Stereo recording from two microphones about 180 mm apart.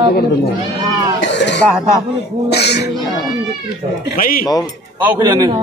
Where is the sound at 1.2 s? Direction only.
75° left (ahead or behind).